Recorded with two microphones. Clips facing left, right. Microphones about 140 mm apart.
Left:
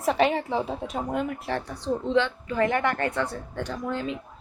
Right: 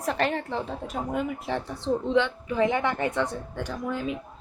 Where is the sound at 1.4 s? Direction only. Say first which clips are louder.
Even; 20° right (ahead or behind).